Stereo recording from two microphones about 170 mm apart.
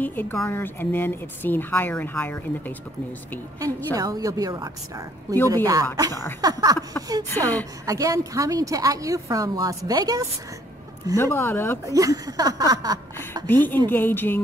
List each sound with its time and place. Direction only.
0.0 s a woman's voice: 10° left (ahead or behind)
3.5 s a woman's voice: 20° right (ahead or behind)
7.2 s a woman's voice: 10° left (ahead or behind)
7.8 s a woman's voice: 20° right (ahead or behind)
11.1 s a woman's voice: 15° left (ahead or behind)
11.8 s a woman's voice: 20° right (ahead or behind)
13.5 s a woman's voice: 10° left (ahead or behind)